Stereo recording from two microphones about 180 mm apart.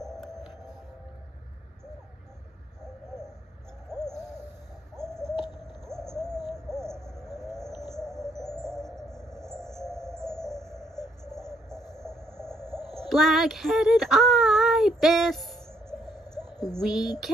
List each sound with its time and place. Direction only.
0.0 s music: centre (ahead or behind)
4.0 s hoot: 5° left (ahead or behind)
4.9 s a sound: 5° left (ahead or behind)
5.9 s bird: 5° left (ahead or behind)
6.5 s hoot: 5° left (ahead or behind)
7.9 s music: 5° left (ahead or behind)
11.2 s a sound: 5° left (ahead or behind)
13.1 s speech: centre (ahead or behind)
16.4 s a sound: 20° left (ahead or behind)
16.7 s speech: centre (ahead or behind)